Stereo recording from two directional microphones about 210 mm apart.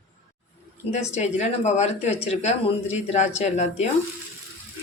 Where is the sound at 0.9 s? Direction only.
30° left (ahead or behind).